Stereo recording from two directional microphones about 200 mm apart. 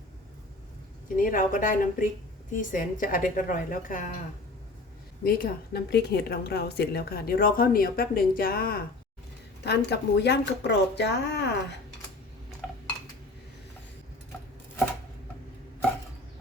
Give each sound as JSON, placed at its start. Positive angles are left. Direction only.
{"t": 1.1, "sound": "a woman's voice", "side_deg": 45}
{"t": 5.2, "sound": "a woman's voice", "side_deg": 50}